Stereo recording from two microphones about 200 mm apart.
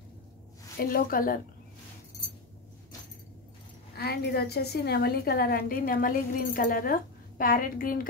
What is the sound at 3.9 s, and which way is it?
A woman's voice, 50° left (ahead or behind).